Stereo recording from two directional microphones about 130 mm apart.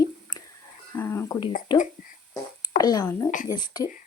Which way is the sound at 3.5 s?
35° left (ahead or behind).